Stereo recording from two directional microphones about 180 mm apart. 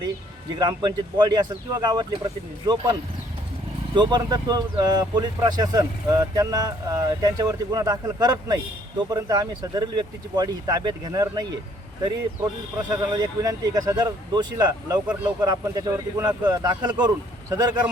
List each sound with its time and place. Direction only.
0.6 s speech: 20° right (ahead or behind)
12.9 s speech: 20° right (ahead or behind)
15.0 s speech: 5° right (ahead or behind)
15.4 s speech: 20° right (ahead or behind)